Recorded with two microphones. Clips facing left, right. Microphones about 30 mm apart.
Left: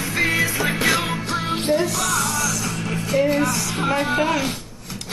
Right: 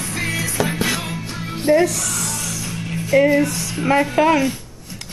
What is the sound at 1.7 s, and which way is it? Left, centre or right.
Speech, right.